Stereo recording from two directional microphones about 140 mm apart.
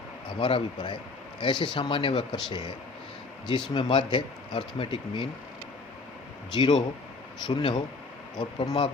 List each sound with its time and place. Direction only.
0.3 s speech: 35° left (ahead or behind)
3.8 s speech: 35° left (ahead or behind)
6.5 s speech: 30° left (ahead or behind)